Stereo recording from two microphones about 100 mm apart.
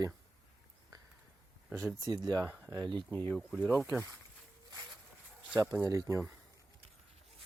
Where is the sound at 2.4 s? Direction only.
15° right (ahead or behind).